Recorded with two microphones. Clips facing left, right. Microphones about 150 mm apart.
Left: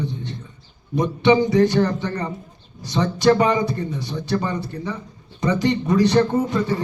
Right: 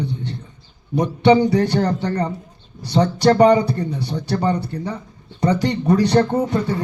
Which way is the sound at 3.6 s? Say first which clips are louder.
Right 1 dB; 65° right (ahead or behind).